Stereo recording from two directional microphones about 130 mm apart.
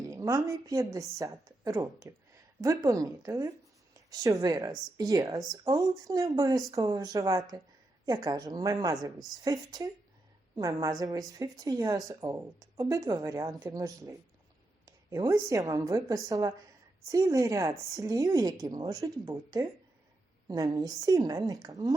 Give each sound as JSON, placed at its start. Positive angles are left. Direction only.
{"t": 0.1, "sound": "speech", "side_deg": -25}